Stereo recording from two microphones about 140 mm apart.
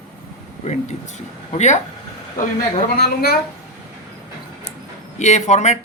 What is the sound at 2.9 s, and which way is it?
Speech, 90° left.